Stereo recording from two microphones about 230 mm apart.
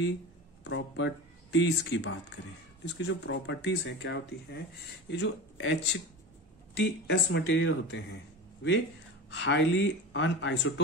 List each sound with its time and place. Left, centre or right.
0.7 s speech: left
9.3 s speech: left